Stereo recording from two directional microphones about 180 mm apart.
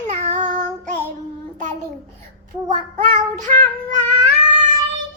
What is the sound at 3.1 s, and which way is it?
Child singing, 45° right (ahead or behind).